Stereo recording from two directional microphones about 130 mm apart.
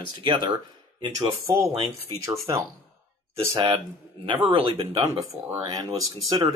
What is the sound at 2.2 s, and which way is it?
Speech, 25° right (ahead or behind).